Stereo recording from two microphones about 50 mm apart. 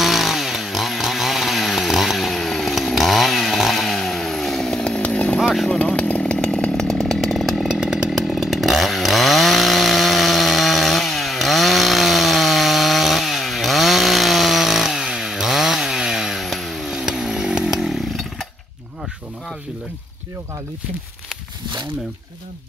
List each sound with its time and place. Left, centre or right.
0.0 s chainsaw: centre; by 5.4 s left
5.4 s chainsaw: centre
5.7 s chainsaw: left
6.9 s chainsaw: centre
7.8 s chainsaw: centre
8.3 s chainsaw: centre
17.0 s chainsaw: centre